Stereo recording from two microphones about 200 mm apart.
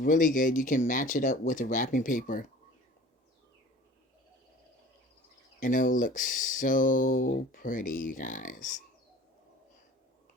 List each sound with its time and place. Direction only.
0.0 s speech: 40° left (ahead or behind)
5.5 s speech: 40° left (ahead or behind)